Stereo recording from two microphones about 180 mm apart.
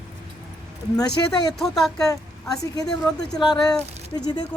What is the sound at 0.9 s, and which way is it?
Speech, 20° left (ahead or behind).